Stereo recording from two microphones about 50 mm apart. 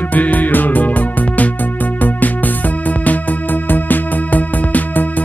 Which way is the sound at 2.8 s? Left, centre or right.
Left.